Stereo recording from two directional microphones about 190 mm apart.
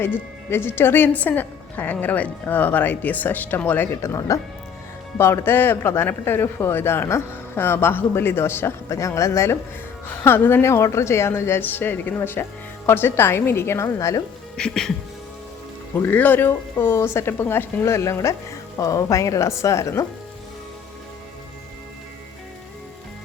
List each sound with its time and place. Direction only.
0.0 s speech: 10° left (ahead or behind)
14.5 s music: 5° left (ahead or behind)
16.0 s speech: 10° left (ahead or behind)